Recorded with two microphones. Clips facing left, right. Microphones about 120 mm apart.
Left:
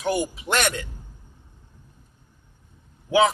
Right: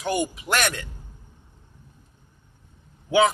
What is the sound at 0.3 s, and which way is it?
Speech, 25° left (ahead or behind).